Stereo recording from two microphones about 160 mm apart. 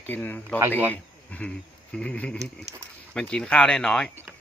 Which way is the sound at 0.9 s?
10° left (ahead or behind).